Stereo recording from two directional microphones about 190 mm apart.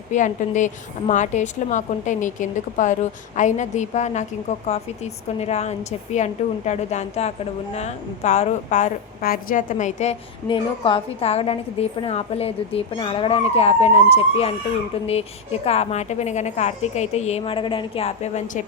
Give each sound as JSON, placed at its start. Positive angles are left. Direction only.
{"t": 0.1, "sound": "a woman's voice", "side_deg": 40}